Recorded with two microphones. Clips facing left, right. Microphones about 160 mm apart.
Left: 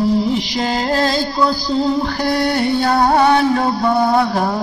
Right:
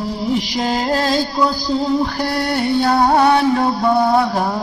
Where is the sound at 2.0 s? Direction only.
5° right (ahead or behind).